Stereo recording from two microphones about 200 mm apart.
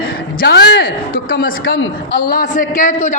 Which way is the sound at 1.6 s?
70° left (ahead or behind).